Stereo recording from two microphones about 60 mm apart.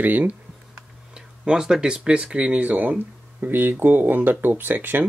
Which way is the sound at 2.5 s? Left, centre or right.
Right.